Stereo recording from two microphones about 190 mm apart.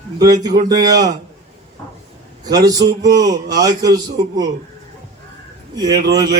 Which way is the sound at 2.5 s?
20° right (ahead or behind).